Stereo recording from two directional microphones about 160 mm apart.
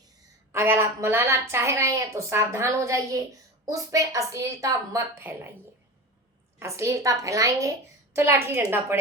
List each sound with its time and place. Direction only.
0.5 s a woman's voice: 15° right (ahead or behind)
6.6 s a woman's voice: 15° right (ahead or behind)